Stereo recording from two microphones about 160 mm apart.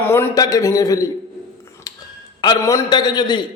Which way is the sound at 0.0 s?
15° left (ahead or behind).